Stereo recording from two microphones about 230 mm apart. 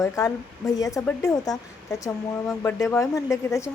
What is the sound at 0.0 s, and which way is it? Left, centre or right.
Speech, centre.